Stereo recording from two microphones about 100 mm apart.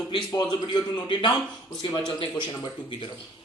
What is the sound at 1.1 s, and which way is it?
Speech, 55° left (ahead or behind).